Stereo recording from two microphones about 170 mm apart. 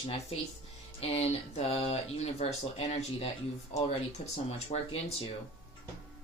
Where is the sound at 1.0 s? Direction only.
35° left (ahead or behind).